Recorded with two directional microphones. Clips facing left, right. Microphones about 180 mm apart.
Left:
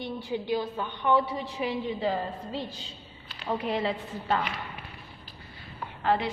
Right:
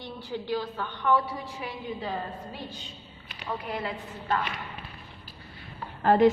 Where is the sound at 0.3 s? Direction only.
15° left (ahead or behind).